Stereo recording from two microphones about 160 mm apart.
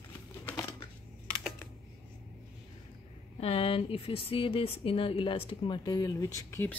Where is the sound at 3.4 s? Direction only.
35° left (ahead or behind).